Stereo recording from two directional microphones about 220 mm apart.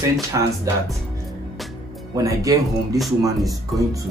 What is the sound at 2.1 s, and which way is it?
Speech, 15° right (ahead or behind).